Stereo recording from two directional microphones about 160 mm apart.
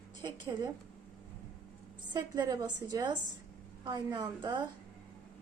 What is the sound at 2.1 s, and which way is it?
A woman's voice, 25° right (ahead or behind).